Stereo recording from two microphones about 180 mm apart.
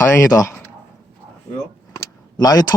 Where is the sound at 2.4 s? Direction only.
20° left (ahead or behind).